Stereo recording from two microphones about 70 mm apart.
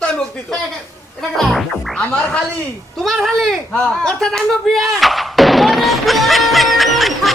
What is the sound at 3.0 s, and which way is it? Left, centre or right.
Music, centre.